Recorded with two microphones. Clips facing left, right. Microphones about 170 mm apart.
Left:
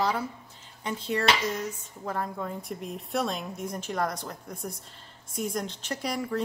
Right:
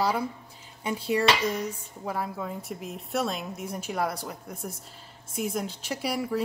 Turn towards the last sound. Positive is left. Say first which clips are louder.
# right 2 dB
turn(degrees=-5)  # may be behind; listen again after turning